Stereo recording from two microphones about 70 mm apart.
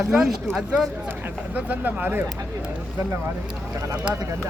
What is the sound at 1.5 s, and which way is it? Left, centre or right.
Speech, right.